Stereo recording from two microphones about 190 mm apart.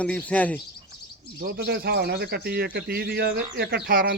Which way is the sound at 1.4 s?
55° right (ahead or behind).